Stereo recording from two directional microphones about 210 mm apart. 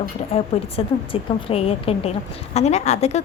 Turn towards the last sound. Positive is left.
turn(degrees=30)  # may be behind; listen again after turning